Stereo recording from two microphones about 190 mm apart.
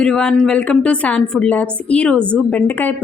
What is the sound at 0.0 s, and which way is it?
Speech, 5° left (ahead or behind).